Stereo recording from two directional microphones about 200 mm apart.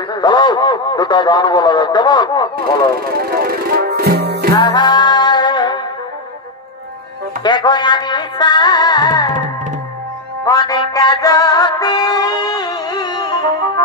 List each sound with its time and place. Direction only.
0.1 s a man's voice: 20° left (ahead or behind)
3.1 s music: 50° right (ahead or behind)
4.6 s music: 20° left (ahead or behind)
7.4 s a man's voice: 20° left (ahead or behind)
10.4 s music: 20° left (ahead or behind)